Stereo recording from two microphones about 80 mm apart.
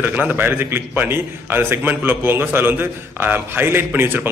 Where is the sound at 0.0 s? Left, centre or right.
Right.